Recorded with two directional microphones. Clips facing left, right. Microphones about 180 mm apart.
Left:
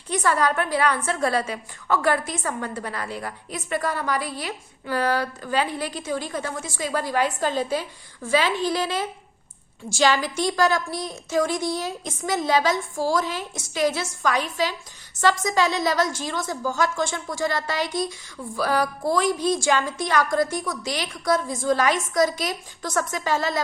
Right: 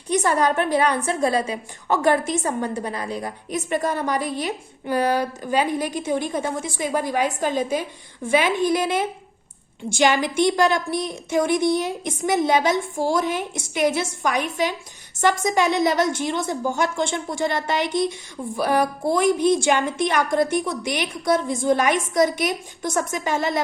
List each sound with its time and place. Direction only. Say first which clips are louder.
0.1 s a woman's voice: right 2 dB; 20° right (ahead or behind)